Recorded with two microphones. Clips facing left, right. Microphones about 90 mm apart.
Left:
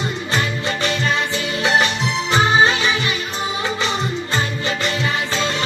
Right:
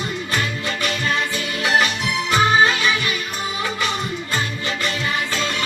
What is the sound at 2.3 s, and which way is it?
Music, 25° left (ahead or behind).